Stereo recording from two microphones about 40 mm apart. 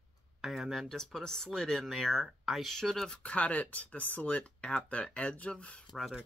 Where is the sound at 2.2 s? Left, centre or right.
Centre.